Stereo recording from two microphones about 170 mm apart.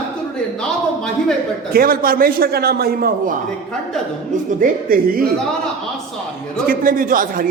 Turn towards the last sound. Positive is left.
turn(degrees=-55)  # may be behind; listen again after turning